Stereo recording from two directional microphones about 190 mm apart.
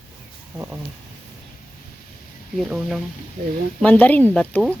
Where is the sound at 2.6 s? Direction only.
5° right (ahead or behind).